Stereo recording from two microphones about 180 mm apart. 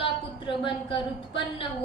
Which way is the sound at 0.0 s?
30° left (ahead or behind).